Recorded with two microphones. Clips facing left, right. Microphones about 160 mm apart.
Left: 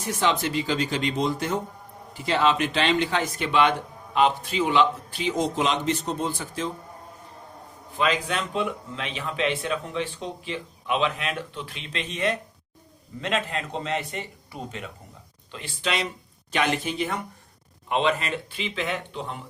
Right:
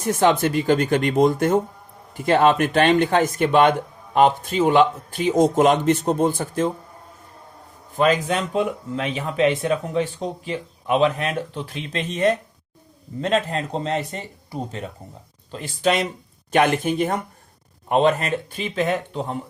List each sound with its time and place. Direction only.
0.0 s speech: 50° right (ahead or behind)
7.9 s speech: 45° right (ahead or behind)